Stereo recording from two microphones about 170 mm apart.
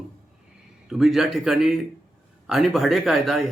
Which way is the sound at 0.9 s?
Centre (ahead or behind).